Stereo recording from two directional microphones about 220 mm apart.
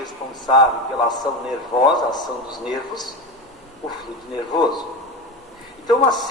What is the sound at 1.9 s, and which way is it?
A man's voice, 20° left (ahead or behind).